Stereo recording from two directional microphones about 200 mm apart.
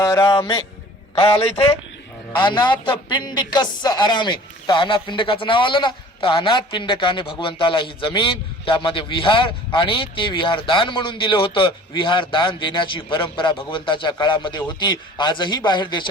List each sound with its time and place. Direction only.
0.0 s a man's voice: 15° left (ahead or behind)
0.3 s a man's voice: 25° left (ahead or behind)